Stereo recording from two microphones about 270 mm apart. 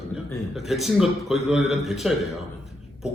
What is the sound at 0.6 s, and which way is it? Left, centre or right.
A man's voice, centre.